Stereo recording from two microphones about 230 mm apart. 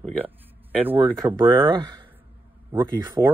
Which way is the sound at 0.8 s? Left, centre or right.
Centre.